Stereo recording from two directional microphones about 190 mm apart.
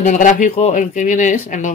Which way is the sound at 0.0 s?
40° left (ahead or behind).